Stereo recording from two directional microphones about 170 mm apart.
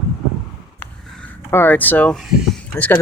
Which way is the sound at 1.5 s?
10° left (ahead or behind).